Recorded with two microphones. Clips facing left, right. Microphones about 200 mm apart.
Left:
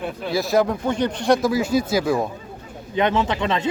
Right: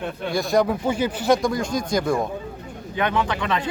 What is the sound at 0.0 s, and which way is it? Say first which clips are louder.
Speech: left 1 dB; 5° left (ahead or behind).